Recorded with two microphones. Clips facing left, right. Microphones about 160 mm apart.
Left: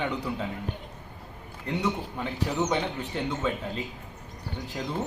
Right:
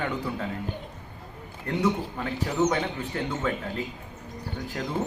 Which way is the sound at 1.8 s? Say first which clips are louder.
Right 5 dB; centre (ahead or behind).